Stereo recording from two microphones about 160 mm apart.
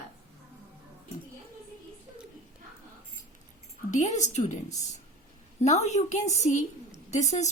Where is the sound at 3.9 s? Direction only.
45° left (ahead or behind).